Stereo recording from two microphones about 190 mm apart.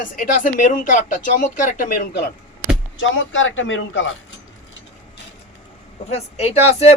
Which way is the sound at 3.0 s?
85° left.